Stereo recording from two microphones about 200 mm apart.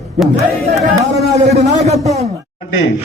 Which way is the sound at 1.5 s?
30° right (ahead or behind).